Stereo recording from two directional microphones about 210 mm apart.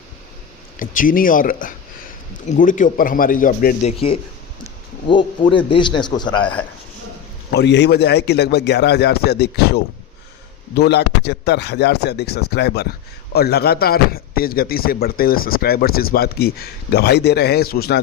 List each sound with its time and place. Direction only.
0.8 s speech: 40° left (ahead or behind)
5.0 s a man's voice: 25° left (ahead or behind)
6.4 s a man's voice: 5° left (ahead or behind)
7.5 s speech: 55° left (ahead or behind)